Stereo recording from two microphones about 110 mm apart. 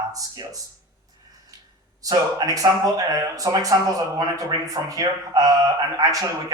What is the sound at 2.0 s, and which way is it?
A man's voice, 30° right (ahead or behind).